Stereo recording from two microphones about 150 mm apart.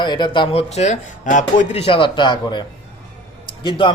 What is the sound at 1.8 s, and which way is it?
A man's voice, 35° left (ahead or behind).